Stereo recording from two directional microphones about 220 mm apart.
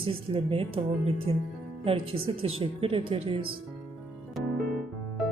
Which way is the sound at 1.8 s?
25° right (ahead or behind).